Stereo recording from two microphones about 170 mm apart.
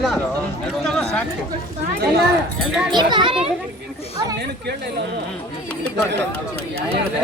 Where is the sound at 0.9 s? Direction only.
5° left (ahead or behind).